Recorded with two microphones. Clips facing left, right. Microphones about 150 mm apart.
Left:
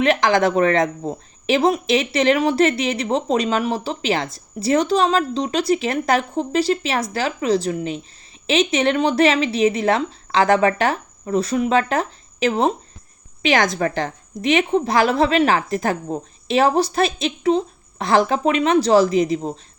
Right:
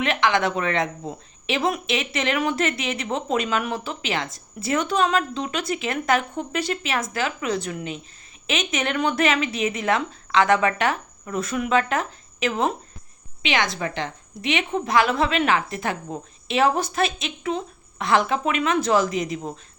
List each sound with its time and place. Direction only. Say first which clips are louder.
0.0 s speech: left 5 dB; 35° left (ahead or behind)